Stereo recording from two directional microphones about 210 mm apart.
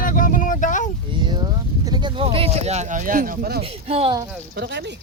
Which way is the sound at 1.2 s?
20° right (ahead or behind).